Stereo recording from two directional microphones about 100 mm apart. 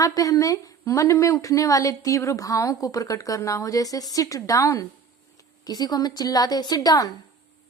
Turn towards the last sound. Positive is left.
turn(degrees=40)  # may be behind; listen again after turning